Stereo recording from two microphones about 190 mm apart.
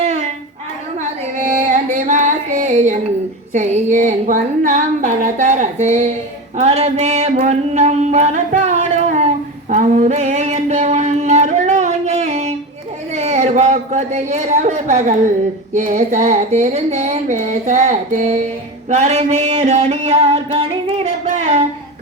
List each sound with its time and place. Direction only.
0.0 s clapping: 35° right (ahead or behind)
1.4 s music: 40° right (ahead or behind)
3.5 s speech: 35° right (ahead or behind)
7.3 s a sound: 35° right (ahead or behind)
15.7 s speech: 40° right (ahead or behind)
18.9 s a sound: 35° right (ahead or behind)